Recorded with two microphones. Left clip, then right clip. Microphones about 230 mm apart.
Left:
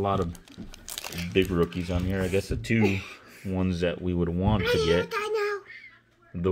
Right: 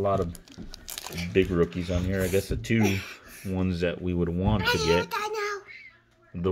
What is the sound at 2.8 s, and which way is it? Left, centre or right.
Speech, right.